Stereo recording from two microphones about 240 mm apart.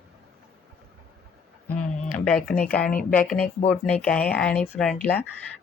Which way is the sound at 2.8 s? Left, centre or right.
Left.